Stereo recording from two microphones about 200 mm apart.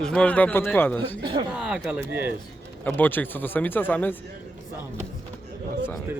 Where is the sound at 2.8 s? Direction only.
10° left (ahead or behind).